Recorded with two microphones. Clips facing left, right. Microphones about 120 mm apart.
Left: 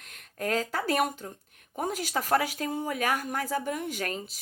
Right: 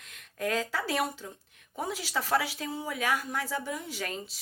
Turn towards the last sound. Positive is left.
turn(degrees=50)  # may be behind; listen again after turning